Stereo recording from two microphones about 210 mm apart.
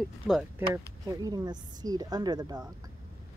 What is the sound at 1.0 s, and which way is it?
Speech, 15° right (ahead or behind).